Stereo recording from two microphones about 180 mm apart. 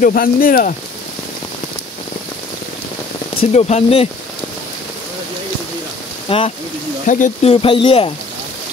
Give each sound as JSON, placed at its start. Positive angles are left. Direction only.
{"t": 0.0, "sound": "speech", "side_deg": 55}
{"t": 3.3, "sound": "speech", "side_deg": 35}
{"t": 6.2, "sound": "speech", "side_deg": 30}
{"t": 7.1, "sound": "speech", "side_deg": 45}
{"t": 7.5, "sound": "speech", "side_deg": 30}